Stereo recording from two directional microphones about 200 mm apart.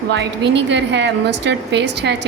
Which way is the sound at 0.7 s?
60° right (ahead or behind).